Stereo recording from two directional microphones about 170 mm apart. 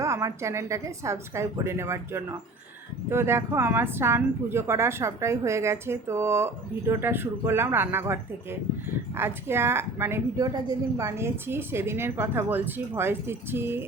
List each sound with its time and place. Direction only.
0.0 s a woman's voice: 15° right (ahead or behind)